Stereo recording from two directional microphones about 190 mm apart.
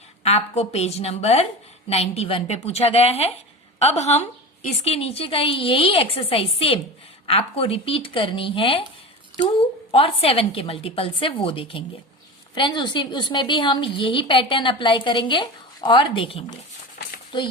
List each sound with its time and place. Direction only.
0.2 s a woman's voice: 35° left (ahead or behind)